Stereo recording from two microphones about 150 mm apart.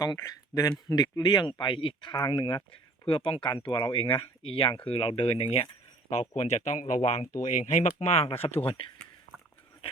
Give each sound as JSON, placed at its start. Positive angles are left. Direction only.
{"t": 0.0, "sound": "speech", "side_deg": 20}